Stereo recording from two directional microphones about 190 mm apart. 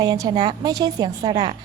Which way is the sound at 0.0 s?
20° right (ahead or behind).